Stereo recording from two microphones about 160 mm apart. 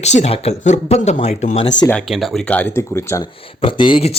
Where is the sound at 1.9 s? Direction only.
5° left (ahead or behind).